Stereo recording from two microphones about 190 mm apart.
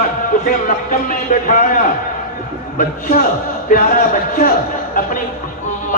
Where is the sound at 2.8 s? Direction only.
45° left (ahead or behind).